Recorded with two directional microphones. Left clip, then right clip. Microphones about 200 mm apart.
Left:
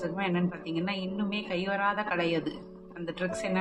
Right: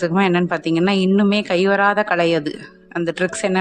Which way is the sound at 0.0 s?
55° right (ahead or behind).